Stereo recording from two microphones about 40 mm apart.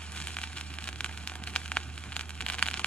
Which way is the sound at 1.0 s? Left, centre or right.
Left.